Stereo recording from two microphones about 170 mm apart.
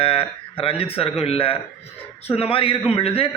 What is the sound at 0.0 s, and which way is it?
A man's voice, 35° left (ahead or behind).